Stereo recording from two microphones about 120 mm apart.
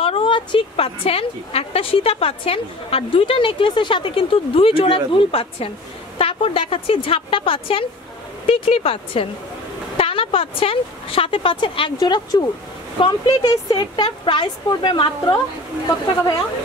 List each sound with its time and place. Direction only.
0.0 s a woman's voice: 50° left (ahead or behind)